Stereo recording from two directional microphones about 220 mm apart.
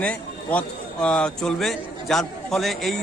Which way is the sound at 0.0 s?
5° left (ahead or behind).